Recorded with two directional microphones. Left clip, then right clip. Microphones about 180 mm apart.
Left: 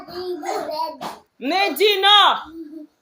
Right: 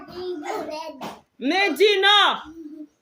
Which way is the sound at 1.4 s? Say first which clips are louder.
Left 1 dB; 40° right (ahead or behind).